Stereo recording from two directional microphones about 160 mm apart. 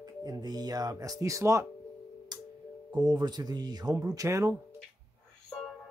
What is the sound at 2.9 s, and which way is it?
Speech, 30° right (ahead or behind).